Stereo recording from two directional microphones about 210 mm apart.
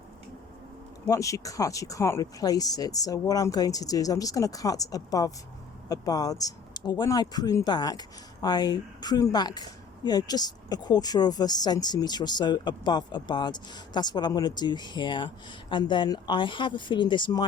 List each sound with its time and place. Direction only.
1.0 s speech: 15° left (ahead or behind)